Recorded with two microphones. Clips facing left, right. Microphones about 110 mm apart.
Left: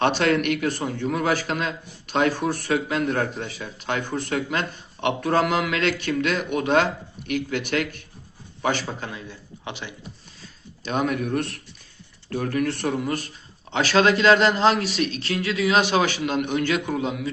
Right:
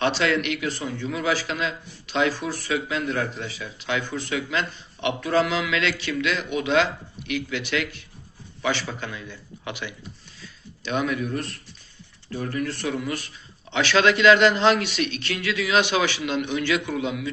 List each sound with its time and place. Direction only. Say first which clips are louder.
0.0 s a man's voice: left 2 dB; 50° left (ahead or behind); by 9.9 s 30° left (ahead or behind)
10.8 s a man's voice: left 1 dB; 45° left (ahead or behind)